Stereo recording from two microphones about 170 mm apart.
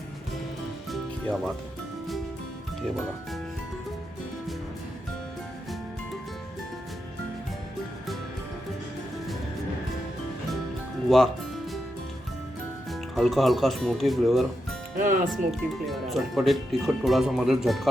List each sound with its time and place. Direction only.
0.9 s music: centre (ahead or behind)
11.1 s music: centre (ahead or behind)
12.9 s speech: centre (ahead or behind)
14.9 s speech: 50° right (ahead or behind)
15.3 s speech: centre (ahead or behind)